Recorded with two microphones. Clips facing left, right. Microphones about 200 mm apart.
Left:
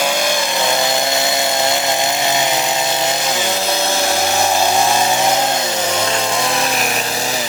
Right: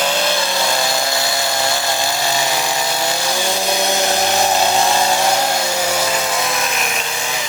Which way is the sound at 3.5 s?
15° right (ahead or behind).